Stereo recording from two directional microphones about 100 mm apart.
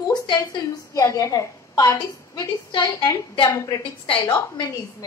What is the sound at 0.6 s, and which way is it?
A woman's voice, 45° left (ahead or behind).